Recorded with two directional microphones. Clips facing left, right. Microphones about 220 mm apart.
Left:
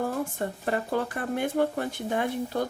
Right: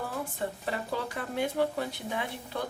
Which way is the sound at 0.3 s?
50° left (ahead or behind).